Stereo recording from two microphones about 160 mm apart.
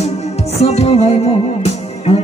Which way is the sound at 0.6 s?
40° left (ahead or behind).